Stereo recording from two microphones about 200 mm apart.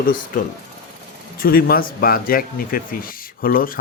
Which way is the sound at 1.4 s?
45° left (ahead or behind).